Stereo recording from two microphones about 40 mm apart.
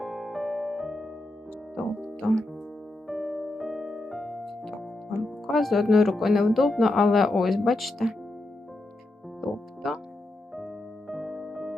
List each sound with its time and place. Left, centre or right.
0.0 s music: centre
2.2 s speech: centre
3.1 s piano: centre
5.2 s speech: centre
9.4 s music: centre
10.5 s keyboard: centre